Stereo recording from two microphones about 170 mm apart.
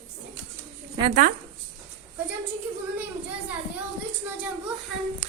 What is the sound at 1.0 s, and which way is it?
Speech, 25° right (ahead or behind).